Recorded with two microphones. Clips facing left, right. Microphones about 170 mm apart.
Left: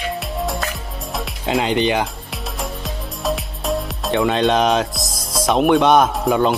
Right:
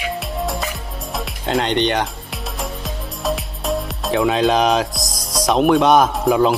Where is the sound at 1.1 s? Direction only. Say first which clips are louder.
Even; centre (ahead or behind).